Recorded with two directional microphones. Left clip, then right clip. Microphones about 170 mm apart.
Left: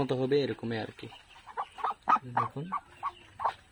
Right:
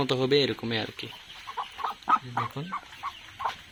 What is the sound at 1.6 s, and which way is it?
Fowl, 20° left (ahead or behind).